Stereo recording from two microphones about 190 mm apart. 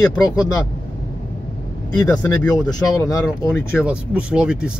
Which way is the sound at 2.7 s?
20° left (ahead or behind).